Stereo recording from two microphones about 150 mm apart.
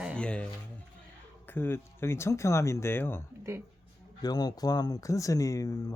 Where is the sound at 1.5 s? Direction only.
15° left (ahead or behind).